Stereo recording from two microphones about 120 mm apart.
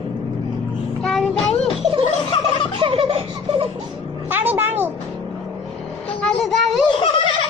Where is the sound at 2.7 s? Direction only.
45° right (ahead or behind).